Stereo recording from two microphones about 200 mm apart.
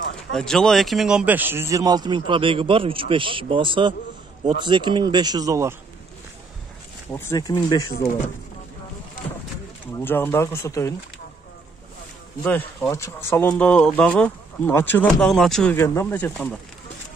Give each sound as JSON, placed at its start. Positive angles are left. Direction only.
{"t": 0.3, "sound": "a man's voice", "side_deg": 5}
{"t": 7.1, "sound": "speech", "side_deg": 15}
{"t": 7.9, "sound": "speech", "side_deg": 50}
{"t": 9.9, "sound": "speech", "side_deg": 10}
{"t": 12.4, "sound": "speech", "side_deg": 10}